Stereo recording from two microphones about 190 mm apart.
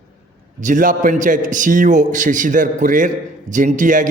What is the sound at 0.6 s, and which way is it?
A man's voice, 45° right (ahead or behind).